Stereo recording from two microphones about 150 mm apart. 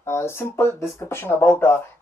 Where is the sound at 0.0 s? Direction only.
15° left (ahead or behind).